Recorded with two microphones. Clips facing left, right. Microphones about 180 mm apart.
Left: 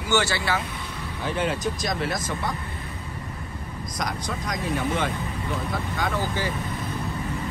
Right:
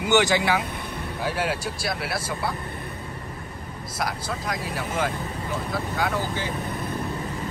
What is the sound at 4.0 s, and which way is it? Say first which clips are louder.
Speech: right 1 dB; 5° right (ahead or behind).